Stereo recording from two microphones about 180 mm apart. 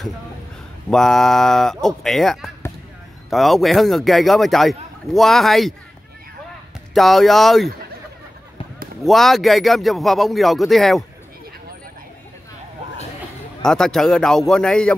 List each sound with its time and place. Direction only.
0.8 s a man's voice: 5° left (ahead or behind)
6.9 s a man's voice: centre (ahead or behind)
9.0 s a man's voice: centre (ahead or behind)
13.6 s a man's voice: 5° left (ahead or behind)